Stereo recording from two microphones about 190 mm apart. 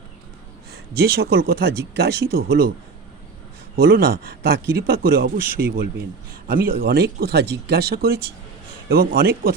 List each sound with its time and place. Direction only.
0.7 s speech: 55° right (ahead or behind)
3.8 s speech: 50° right (ahead or behind)